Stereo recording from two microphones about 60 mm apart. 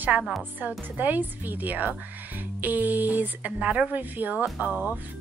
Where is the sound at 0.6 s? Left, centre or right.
Right.